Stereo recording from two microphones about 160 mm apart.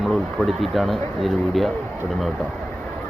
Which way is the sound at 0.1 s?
Centre (ahead or behind).